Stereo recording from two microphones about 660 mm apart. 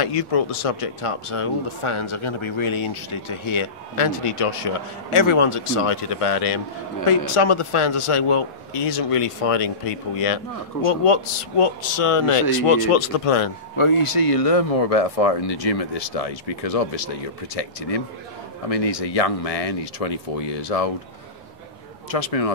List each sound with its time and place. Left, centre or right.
0.0 s speech: left
22.1 s speech: left